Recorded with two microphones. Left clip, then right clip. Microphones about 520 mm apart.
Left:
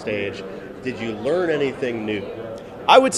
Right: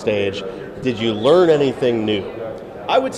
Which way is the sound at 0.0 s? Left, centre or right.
Right.